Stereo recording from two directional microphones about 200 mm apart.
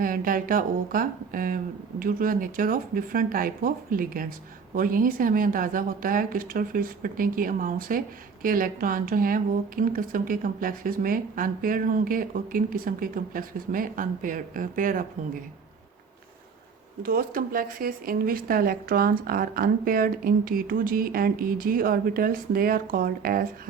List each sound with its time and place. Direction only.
0.0 s speech: 45° right (ahead or behind)
17.0 s speech: 45° right (ahead or behind)